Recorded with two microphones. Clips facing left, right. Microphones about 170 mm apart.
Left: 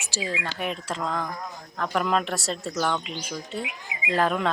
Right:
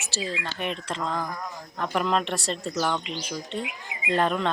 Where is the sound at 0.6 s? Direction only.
5° left (ahead or behind).